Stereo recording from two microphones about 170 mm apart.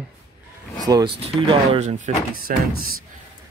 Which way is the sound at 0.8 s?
20° right (ahead or behind).